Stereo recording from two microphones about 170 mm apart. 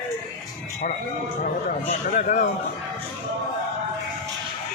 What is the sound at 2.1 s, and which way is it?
Speech, 45° left (ahead or behind).